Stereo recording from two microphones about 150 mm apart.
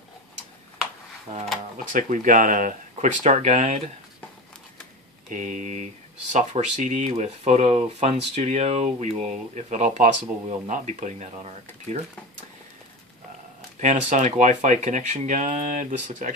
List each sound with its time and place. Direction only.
1.9 s speech: 60° right (ahead or behind)
5.3 s speech: 60° right (ahead or behind)
13.7 s speech: 55° right (ahead or behind)